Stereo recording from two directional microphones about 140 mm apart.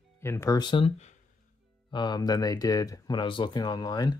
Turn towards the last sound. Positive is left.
turn(degrees=30)  # may be behind; listen again after turning